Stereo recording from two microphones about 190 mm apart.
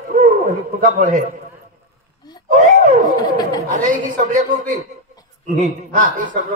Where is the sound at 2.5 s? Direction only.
40° right (ahead or behind).